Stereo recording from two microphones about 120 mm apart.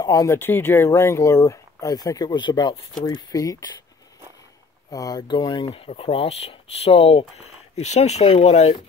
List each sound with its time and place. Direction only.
0.0 s speech: 30° left (ahead or behind)
4.9 s speech: 30° left (ahead or behind)
5.7 s speech: 55° left (ahead or behind)